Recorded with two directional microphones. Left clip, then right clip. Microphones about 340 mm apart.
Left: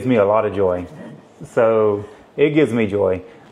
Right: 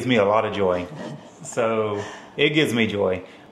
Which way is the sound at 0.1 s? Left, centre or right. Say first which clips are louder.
Left 4 dB; left.